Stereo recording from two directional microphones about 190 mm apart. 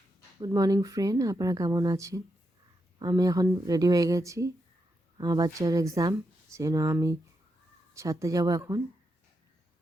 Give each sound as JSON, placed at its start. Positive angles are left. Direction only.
{"t": 0.3, "sound": "speech", "side_deg": -20}